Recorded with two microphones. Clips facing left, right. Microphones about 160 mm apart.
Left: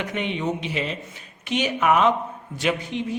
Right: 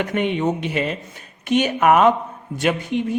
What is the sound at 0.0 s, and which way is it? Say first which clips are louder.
Speech: right 6 dB; 50° right (ahead or behind).